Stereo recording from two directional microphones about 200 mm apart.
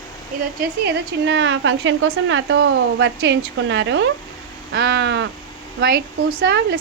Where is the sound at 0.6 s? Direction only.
60° right (ahead or behind).